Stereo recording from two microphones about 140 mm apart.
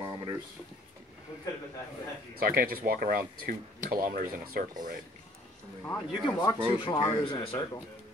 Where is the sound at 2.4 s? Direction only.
90° right.